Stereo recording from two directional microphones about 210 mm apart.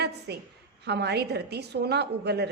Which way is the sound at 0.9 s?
50° right (ahead or behind).